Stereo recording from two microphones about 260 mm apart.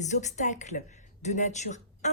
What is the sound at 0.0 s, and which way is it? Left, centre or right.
Speech, left.